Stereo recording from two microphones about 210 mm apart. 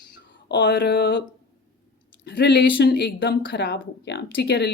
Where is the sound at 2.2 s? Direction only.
55° left (ahead or behind).